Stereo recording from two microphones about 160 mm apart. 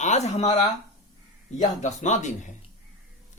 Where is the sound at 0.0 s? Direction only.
45° left (ahead or behind).